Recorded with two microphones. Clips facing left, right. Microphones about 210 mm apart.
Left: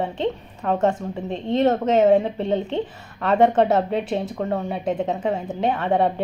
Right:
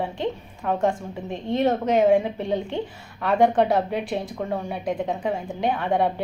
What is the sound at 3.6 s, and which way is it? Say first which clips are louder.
A woman's voice: left 2 dB; centre (ahead or behind).